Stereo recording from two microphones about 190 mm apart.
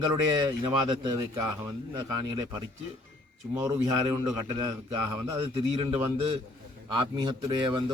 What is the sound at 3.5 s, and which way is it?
A man's voice, 15° right (ahead or behind).